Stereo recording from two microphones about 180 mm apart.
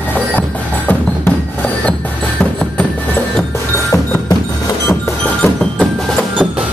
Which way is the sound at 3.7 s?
15° left (ahead or behind).